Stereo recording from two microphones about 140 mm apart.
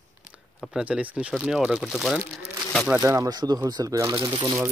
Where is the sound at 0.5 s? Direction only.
Centre (ahead or behind).